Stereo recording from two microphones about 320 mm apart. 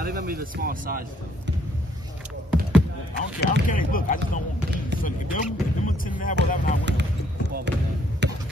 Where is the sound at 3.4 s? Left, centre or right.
Left.